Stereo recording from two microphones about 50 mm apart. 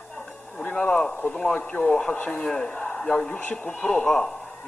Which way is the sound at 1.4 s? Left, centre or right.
Left.